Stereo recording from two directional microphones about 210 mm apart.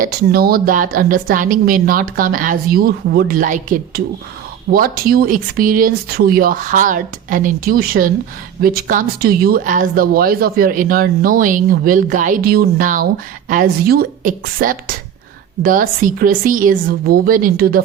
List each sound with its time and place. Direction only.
0.0 s a woman's voice: 45° right (ahead or behind)